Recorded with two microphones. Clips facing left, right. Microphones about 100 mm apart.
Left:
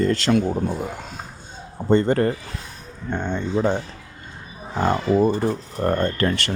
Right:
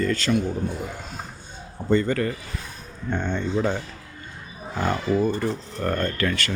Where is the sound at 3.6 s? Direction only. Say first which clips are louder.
Left 3 dB; 20° left (ahead or behind).